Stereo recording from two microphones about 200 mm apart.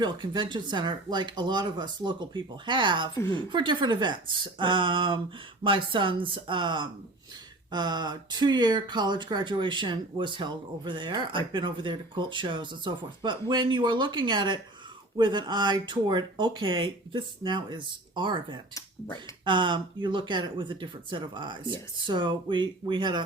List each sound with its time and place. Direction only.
0.0 s speech: 20° right (ahead or behind)
19.5 s speech: 25° right (ahead or behind)